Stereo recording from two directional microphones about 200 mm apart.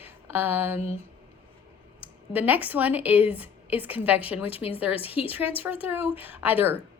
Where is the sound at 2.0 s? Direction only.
10° right (ahead or behind).